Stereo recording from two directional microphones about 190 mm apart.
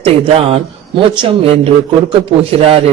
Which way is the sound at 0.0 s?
30° right (ahead or behind).